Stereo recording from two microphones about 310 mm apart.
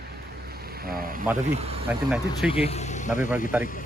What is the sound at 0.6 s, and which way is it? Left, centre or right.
Boat, right.